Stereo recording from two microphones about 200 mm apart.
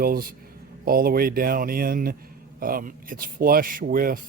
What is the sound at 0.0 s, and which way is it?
Speech, 45° right (ahead or behind).